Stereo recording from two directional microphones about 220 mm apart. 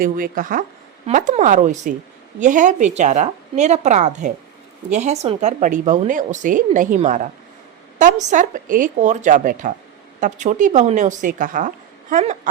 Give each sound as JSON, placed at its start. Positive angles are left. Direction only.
{"t": 0.0, "sound": "a woman's voice", "side_deg": -40}